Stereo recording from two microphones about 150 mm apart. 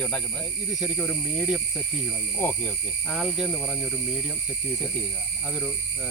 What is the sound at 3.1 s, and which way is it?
Speech, 5° right (ahead or behind).